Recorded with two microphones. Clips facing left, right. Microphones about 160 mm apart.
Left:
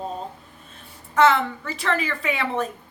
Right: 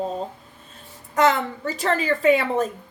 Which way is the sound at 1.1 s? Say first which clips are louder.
Left 1 dB; 40° right (ahead or behind).